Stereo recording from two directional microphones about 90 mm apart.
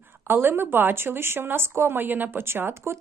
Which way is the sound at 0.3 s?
25° right (ahead or behind).